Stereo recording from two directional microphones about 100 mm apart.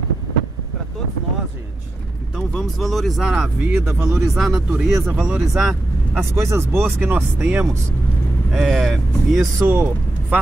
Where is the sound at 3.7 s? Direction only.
25° right (ahead or behind).